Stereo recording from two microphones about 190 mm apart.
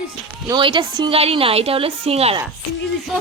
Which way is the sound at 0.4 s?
25° right (ahead or behind).